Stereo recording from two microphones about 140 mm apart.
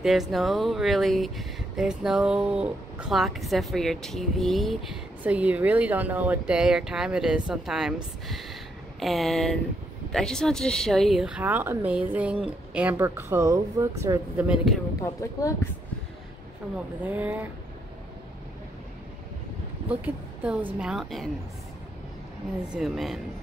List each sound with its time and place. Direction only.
0.0 s speech: centre (ahead or behind); by 14.4 s 20° right (ahead or behind)
14.5 s speech: 5° right (ahead or behind)
17.0 s speech: 10° right (ahead or behind)
19.9 s speech: 10° right (ahead or behind)
22.7 s speech: centre (ahead or behind)